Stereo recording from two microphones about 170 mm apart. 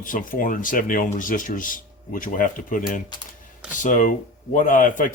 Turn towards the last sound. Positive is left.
turn(degrees=50)  # may be behind; listen again after turning